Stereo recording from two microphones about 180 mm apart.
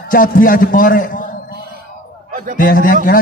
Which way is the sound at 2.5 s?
50° left (ahead or behind).